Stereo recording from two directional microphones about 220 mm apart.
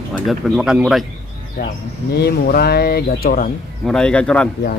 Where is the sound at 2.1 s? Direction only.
45° left (ahead or behind).